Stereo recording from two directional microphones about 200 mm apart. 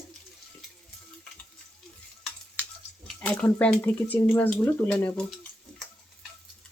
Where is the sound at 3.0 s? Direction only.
5° left (ahead or behind).